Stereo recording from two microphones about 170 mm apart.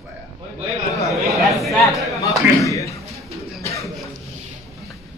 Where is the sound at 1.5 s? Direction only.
Centre (ahead or behind).